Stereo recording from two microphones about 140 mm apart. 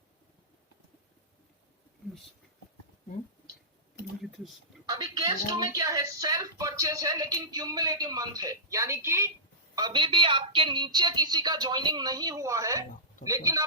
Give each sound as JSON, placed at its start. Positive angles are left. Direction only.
{"t": 4.2, "sound": "speech", "side_deg": 0}
{"t": 4.9, "sound": "a woman's voice", "side_deg": -30}
{"t": 9.7, "sound": "speech", "side_deg": -30}